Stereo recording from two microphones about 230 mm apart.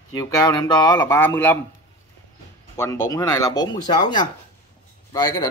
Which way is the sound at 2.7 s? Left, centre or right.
Centre.